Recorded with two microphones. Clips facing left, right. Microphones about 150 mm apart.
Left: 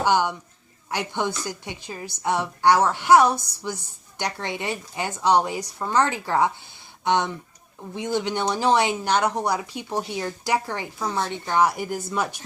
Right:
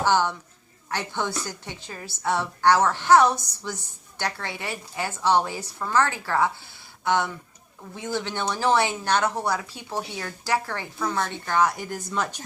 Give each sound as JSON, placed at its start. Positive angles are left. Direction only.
{"t": 0.0, "sound": "a woman's voice", "side_deg": 15}